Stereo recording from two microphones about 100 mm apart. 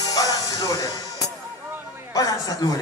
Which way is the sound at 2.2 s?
35° left (ahead or behind).